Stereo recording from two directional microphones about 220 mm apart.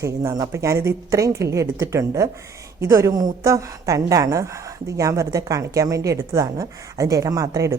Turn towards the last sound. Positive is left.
turn(degrees=-15)  # may be behind; listen again after turning